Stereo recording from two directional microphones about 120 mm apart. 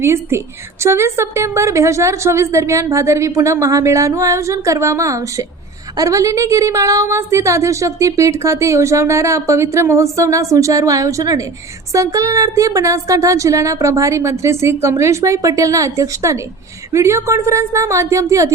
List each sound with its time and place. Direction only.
0.0 s a woman's voice: 20° right (ahead or behind)